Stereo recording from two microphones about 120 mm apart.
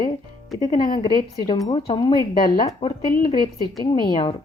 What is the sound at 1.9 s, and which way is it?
Speech, 45° left (ahead or behind).